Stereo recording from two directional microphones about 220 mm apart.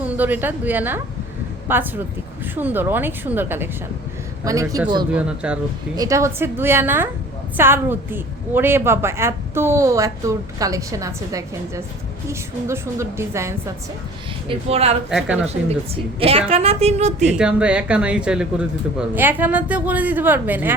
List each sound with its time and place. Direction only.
0.0 s a woman's voice: 10° right (ahead or behind)
5.1 s a woman's voice: 5° right (ahead or behind)
14.4 s speech: 25° right (ahead or behind)
16.5 s speech: 25° right (ahead or behind)
17.3 s a woman's voice: 5° right (ahead or behind)